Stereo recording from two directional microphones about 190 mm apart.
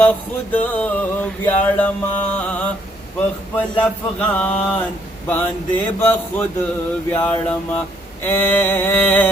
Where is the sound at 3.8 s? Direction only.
10° left (ahead or behind).